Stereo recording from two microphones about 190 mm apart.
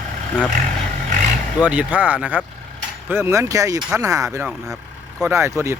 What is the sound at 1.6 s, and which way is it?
Speech, 10° right (ahead or behind).